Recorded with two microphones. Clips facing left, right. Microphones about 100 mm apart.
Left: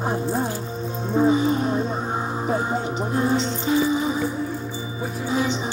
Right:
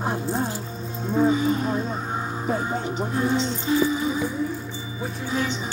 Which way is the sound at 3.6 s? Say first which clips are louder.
Left 2 dB; 30° left (ahead or behind).